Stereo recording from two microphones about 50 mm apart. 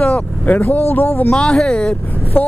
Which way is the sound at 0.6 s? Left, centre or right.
Left.